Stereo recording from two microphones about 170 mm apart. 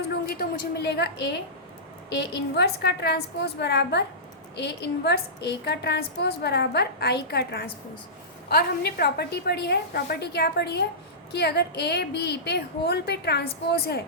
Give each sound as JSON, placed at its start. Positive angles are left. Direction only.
{"t": 0.3, "sound": "a woman's voice", "side_deg": 70}